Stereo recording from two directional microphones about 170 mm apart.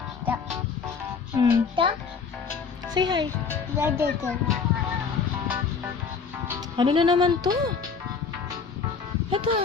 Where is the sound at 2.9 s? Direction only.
25° right (ahead or behind).